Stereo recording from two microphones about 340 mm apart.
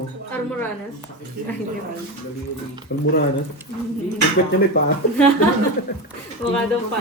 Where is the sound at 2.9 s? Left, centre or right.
Left.